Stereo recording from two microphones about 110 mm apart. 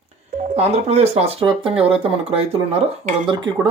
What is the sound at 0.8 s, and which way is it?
Speech, 75° right (ahead or behind).